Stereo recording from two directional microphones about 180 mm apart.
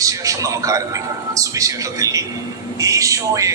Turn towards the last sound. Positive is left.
turn(degrees=-15)  # may be behind; listen again after turning